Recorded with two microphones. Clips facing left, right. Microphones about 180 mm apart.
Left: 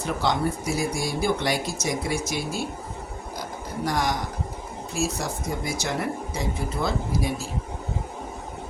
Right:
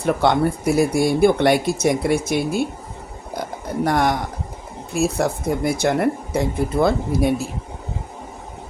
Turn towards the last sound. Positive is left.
turn(degrees=-60)  # may be behind; listen again after turning